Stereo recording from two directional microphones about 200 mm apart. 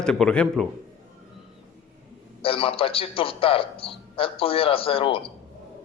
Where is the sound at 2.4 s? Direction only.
25° left (ahead or behind).